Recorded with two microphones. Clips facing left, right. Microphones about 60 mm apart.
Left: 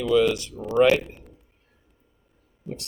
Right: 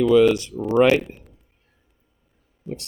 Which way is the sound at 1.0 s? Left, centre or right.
Centre.